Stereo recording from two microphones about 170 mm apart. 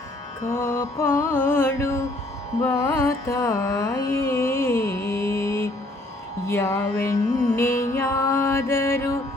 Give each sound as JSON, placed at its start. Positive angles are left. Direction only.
{"t": 0.5, "sound": "music", "side_deg": 15}
{"t": 2.6, "sound": "carnatic music", "side_deg": 15}
{"t": 6.5, "sound": "music", "side_deg": 15}